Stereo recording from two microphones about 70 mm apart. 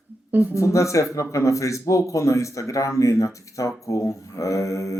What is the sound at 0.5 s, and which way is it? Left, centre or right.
Speech, left.